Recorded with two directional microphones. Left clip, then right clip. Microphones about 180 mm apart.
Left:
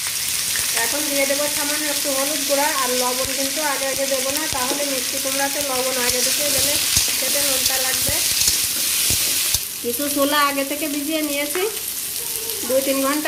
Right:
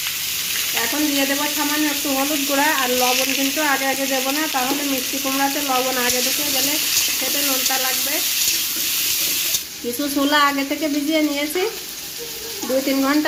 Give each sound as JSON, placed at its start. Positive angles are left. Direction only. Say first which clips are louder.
{"t": 10.2, "sound": "frying", "louder": "right 2 dB", "side_deg": -20}